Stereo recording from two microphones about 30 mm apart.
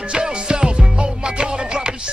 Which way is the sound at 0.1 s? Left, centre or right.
Right.